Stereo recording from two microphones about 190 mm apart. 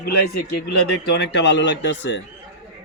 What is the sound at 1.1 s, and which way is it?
Speech, 65° left (ahead or behind).